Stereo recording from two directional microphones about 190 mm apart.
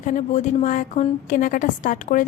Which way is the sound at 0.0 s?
40° left (ahead or behind).